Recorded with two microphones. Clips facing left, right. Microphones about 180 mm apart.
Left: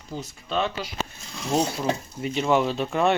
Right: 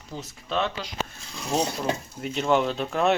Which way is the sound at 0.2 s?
Centre (ahead or behind).